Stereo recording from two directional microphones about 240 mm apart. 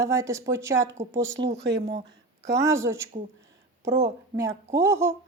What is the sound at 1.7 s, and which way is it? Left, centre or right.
Speech, right.